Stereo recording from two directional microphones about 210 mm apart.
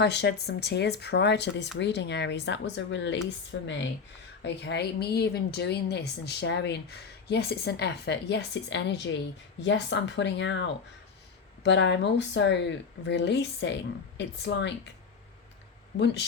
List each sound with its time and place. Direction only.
0.0 s a woman's voice: 55° left (ahead or behind)
16.0 s speech: 55° left (ahead or behind)